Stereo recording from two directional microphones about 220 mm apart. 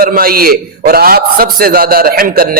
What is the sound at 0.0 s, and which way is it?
A man's voice, 40° right (ahead or behind).